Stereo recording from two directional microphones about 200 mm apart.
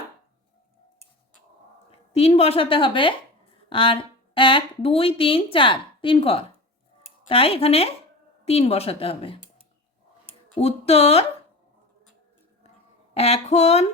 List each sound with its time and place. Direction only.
1.9 s a woman's voice: 30° left (ahead or behind)
10.6 s speech: 30° left (ahead or behind)
13.1 s speech: 30° left (ahead or behind)